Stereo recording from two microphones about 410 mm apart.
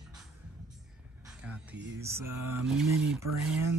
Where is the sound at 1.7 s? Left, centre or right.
Right.